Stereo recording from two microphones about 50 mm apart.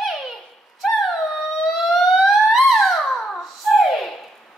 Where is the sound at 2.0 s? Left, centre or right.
Centre.